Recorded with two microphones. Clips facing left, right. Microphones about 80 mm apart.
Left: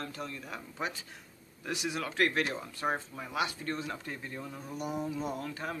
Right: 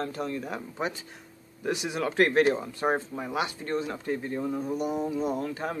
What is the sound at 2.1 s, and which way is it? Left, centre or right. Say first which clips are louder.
Speech: right 9 dB; right.